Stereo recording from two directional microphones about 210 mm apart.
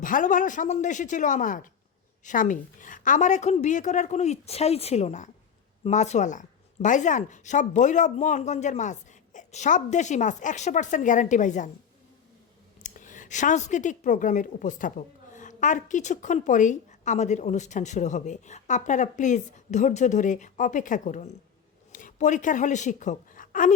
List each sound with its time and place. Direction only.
0.0 s a woman's voice: 40° left (ahead or behind)
12.8 s a woman's voice: 35° left (ahead or behind)